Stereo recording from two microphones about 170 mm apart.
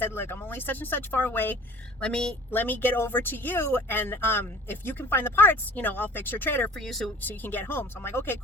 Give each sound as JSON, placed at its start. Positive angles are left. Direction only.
{"t": 0.0, "sound": "a woman's voice", "side_deg": 15}